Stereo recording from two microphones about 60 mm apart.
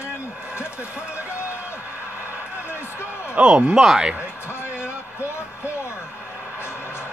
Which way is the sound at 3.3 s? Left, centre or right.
Centre.